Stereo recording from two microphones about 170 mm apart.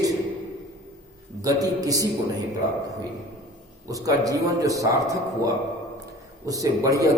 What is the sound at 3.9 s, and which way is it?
A man's voice, 20° right (ahead or behind).